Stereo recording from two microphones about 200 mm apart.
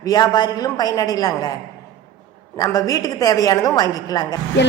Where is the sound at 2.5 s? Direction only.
20° left (ahead or behind).